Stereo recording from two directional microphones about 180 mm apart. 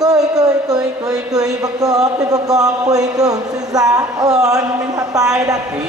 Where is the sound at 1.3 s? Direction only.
20° right (ahead or behind).